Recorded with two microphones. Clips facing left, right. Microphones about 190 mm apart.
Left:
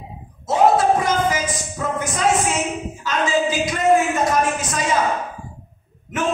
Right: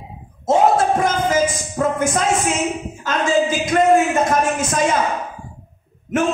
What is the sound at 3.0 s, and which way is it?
A man's voice, 50° right (ahead or behind).